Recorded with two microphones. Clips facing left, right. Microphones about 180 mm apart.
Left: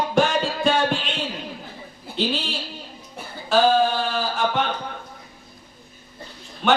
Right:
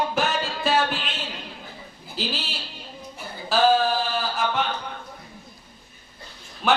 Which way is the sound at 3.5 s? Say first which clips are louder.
Left 2 dB; centre (ahead or behind).